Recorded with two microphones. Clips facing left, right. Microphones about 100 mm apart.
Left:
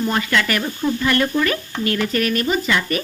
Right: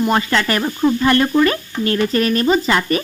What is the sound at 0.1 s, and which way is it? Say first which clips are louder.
Stir: right 3 dB; 30° right (ahead or behind).